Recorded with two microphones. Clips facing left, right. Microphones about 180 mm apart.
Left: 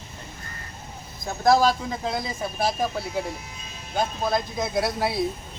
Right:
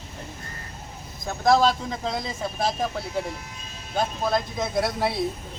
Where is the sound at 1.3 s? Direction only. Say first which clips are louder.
Even; 5° left (ahead or behind).